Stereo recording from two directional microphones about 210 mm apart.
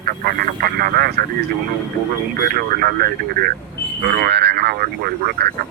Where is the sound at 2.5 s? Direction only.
45° right (ahead or behind).